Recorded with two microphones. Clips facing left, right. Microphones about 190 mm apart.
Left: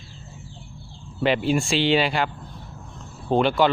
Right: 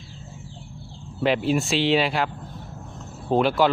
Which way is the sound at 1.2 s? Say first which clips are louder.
Even; centre (ahead or behind).